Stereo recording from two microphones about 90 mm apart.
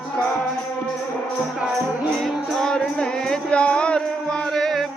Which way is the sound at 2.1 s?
5° left (ahead or behind).